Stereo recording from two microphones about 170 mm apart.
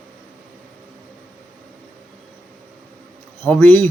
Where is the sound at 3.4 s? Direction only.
10° left (ahead or behind).